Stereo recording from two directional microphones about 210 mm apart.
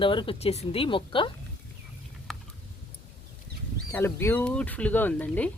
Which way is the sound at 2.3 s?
Centre (ahead or behind).